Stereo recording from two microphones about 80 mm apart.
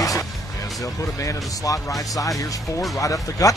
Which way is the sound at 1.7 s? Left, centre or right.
Left.